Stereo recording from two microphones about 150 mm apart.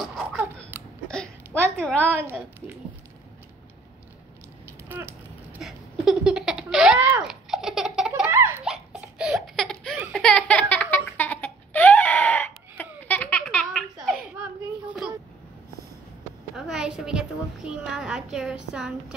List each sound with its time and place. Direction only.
0.0 s babbling: centre (ahead or behind)
1.0 s hiccup: 5° left (ahead or behind)
2.0 s a woman's voice: 10° right (ahead or behind)
4.9 s a sound: 15° right (ahead or behind)
5.5 s laughter: centre (ahead or behind)
7.0 s a sound: 10° right (ahead or behind)
7.4 s baby laughter: centre (ahead or behind)
8.3 s baby laughter: 15° right (ahead or behind)
8.6 s laughter: 5° right (ahead or behind)
14.0 s children playing: centre (ahead or behind)
16.5 s a sound: 5° right (ahead or behind)